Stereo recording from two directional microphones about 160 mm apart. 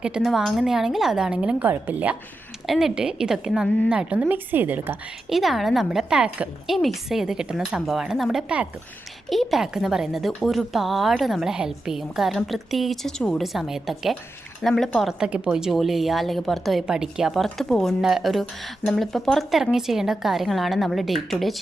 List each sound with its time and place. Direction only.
0.0 s speech: 5° right (ahead or behind)